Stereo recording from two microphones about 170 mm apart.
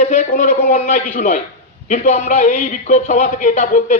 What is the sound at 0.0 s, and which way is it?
A man's voice, 45° left (ahead or behind).